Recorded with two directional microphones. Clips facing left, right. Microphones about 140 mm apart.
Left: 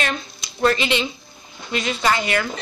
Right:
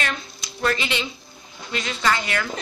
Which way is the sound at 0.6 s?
25° left (ahead or behind).